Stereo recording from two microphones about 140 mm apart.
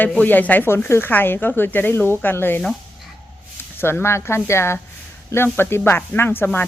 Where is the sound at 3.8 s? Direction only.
15° left (ahead or behind).